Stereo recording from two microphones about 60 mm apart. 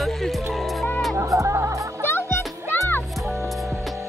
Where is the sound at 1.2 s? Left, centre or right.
Right.